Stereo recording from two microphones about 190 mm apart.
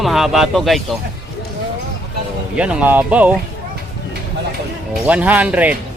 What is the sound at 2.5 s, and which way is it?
Speech, 5° right (ahead or behind).